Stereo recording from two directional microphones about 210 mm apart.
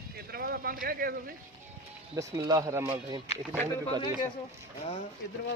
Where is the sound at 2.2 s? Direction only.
15° right (ahead or behind).